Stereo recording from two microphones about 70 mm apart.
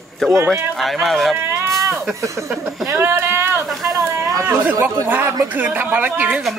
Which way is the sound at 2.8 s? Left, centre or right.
Right.